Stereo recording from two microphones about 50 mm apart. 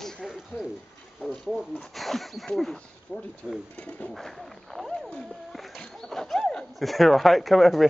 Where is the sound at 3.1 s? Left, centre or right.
Centre.